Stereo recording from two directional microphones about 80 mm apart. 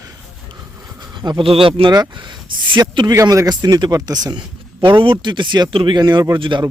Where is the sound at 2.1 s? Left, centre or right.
Right.